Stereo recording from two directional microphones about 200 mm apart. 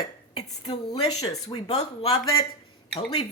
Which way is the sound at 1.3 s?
30° left (ahead or behind).